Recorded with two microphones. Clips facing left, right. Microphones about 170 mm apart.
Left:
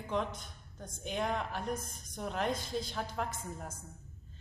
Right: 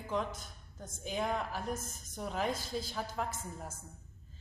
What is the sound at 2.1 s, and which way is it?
A woman's voice, 5° right (ahead or behind).